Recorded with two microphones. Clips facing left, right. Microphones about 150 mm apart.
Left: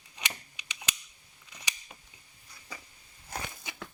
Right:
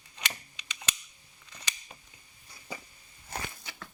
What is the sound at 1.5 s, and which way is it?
Scissors, 15° left (ahead or behind).